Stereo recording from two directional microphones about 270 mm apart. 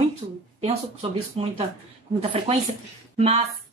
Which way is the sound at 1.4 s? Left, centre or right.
Right.